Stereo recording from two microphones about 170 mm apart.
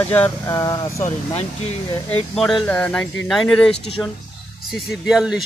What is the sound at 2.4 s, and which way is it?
Speech, centre (ahead or behind).